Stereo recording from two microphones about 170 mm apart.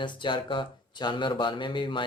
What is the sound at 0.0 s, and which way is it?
Speech, 30° left (ahead or behind).